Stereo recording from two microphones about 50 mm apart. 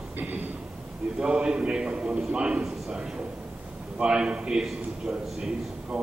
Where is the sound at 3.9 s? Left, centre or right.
Centre.